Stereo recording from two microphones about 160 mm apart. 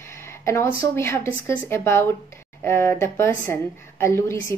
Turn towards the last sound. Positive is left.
turn(degrees=15)  # may be behind; listen again after turning